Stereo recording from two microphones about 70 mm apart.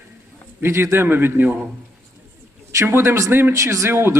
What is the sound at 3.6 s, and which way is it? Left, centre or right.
Speech, right.